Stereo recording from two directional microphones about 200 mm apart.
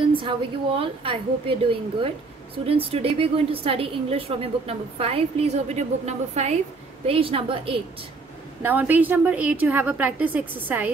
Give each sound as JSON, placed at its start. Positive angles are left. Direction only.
{"t": 0.1, "sound": "a woman's voice", "side_deg": -25}
{"t": 8.6, "sound": "a woman's voice", "side_deg": -10}